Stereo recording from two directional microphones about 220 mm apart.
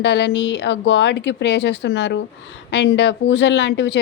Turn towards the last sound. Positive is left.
turn(degrees=50)  # may be behind; listen again after turning